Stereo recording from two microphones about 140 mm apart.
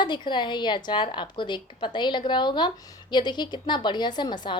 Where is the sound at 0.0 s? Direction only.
35° left (ahead or behind).